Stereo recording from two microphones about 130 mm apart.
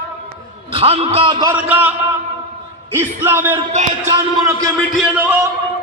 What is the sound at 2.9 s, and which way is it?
A man's voice, 15° right (ahead or behind).